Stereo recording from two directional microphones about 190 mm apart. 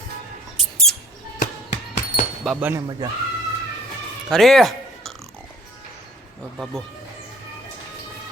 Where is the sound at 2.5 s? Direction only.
10° right (ahead or behind).